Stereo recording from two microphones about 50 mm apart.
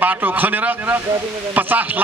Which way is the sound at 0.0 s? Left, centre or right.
Right.